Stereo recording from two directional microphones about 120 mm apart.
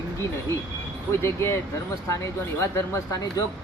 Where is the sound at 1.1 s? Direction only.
20° left (ahead or behind).